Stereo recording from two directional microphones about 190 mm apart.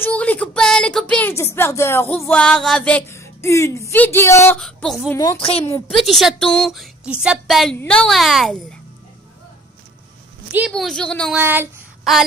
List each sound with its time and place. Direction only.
0.0 s speech: 10° left (ahead or behind)
4.6 s child singing: 5° left (ahead or behind)
5.1 s speech: 15° left (ahead or behind)
5.4 s a woman's voice: 30° left (ahead or behind)
6.0 s a woman's voice: centre (ahead or behind)
10.7 s a woman's voice: 5° left (ahead or behind)
11.3 s a sound: 10° right (ahead or behind)
12.0 s a sound: centre (ahead or behind)